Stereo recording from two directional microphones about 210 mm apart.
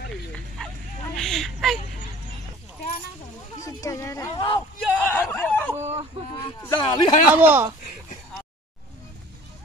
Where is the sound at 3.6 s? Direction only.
15° left (ahead or behind).